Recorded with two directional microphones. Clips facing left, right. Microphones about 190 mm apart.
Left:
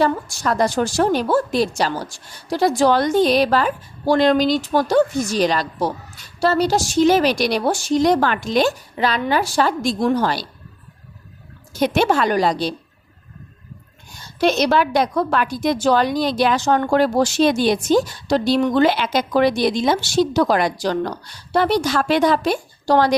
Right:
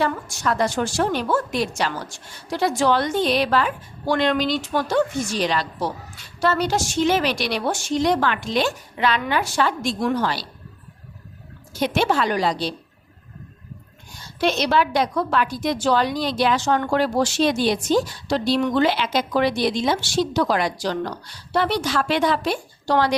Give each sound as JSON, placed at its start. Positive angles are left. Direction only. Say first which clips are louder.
{"t": 0.0, "sound": "a woman's voice", "louder": "left 4 dB", "side_deg": 35}
{"t": 11.7, "sound": "a woman's voice", "louder": "left 4 dB", "side_deg": 45}
{"t": 14.3, "sound": "a woman's voice", "louder": "left 3 dB", "side_deg": 45}